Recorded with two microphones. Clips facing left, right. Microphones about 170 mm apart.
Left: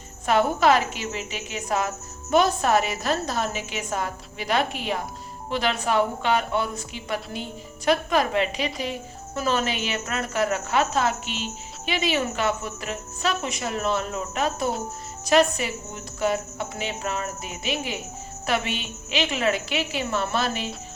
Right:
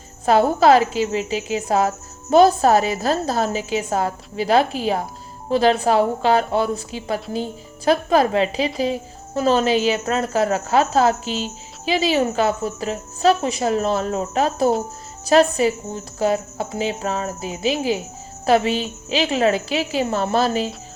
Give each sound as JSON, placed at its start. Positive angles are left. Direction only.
{"t": 0.3, "sound": "speech", "side_deg": -30}